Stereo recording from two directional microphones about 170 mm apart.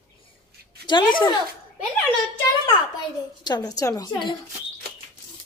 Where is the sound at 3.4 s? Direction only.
25° left (ahead or behind).